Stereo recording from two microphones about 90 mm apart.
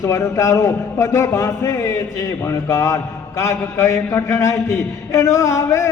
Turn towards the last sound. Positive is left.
turn(degrees=35)  # may be behind; listen again after turning